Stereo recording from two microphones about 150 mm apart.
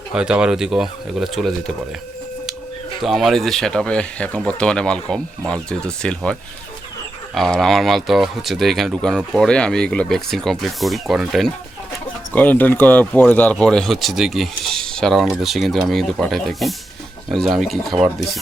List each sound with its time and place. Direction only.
0.1 s speech: 5° right (ahead or behind)
3.0 s speech: centre (ahead or behind)
7.3 s speech: 5° left (ahead or behind)
12.3 s speech: 10° left (ahead or behind)